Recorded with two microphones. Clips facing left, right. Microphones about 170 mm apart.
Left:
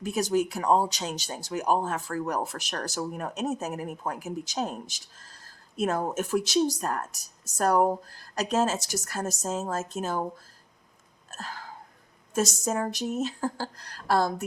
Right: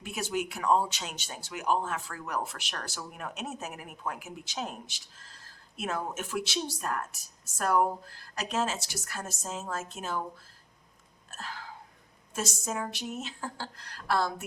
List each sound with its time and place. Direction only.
0.0 s speech: 40° left (ahead or behind)
11.3 s a sound: 45° left (ahead or behind)
12.3 s speech: 40° left (ahead or behind)